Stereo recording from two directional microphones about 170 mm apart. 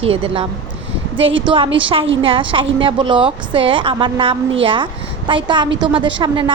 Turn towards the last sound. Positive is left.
turn(degrees=-30)  # may be behind; listen again after turning